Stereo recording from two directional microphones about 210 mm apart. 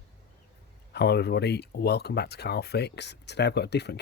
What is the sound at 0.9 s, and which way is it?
Speech, 50° left (ahead or behind).